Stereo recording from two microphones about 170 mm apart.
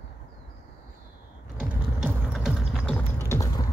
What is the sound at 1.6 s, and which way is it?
Music, 10° right (ahead or behind).